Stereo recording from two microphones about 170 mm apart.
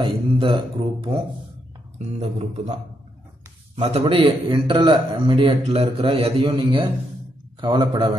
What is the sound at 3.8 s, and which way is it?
A man's voice, 30° right (ahead or behind).